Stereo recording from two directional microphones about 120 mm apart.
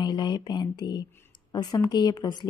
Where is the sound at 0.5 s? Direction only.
35° left (ahead or behind).